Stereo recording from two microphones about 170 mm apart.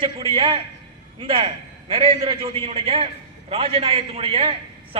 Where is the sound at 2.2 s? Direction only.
30° right (ahead or behind).